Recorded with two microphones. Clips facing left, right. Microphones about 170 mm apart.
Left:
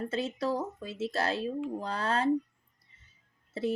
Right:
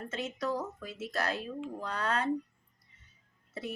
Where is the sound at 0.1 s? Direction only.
30° left (ahead or behind).